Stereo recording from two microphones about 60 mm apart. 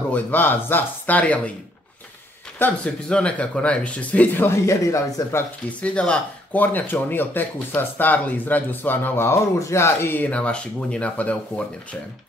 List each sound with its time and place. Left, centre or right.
0.1 s speech: left
2.8 s speech: centre
4.5 s speech: left
5.7 s speech: centre; by 9.4 s left
9.6 s speech: left